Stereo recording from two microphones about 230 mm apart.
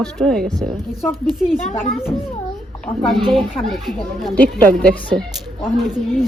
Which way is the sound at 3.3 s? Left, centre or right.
Centre.